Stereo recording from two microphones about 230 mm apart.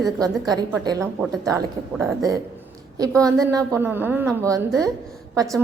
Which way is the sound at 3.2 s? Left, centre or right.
Centre.